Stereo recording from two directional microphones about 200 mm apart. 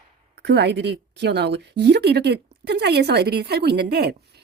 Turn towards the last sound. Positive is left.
turn(degrees=-55)  # may be behind; listen again after turning